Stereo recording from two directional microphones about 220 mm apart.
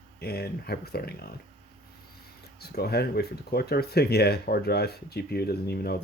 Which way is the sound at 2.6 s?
45° left (ahead or behind).